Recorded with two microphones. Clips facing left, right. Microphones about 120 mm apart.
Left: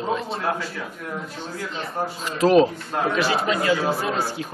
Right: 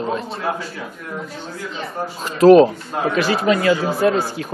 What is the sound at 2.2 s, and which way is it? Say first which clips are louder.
Speech: right 7 dB; 50° right (ahead or behind).